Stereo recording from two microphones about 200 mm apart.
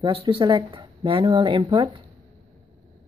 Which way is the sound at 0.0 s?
25° right (ahead or behind).